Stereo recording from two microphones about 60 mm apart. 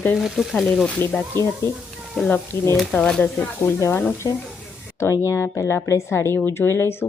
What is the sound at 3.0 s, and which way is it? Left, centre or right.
Speech, centre.